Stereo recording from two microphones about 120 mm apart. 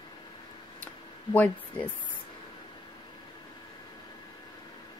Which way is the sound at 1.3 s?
15° left (ahead or behind).